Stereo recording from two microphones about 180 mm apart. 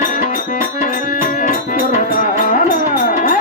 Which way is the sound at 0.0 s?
45° left (ahead or behind).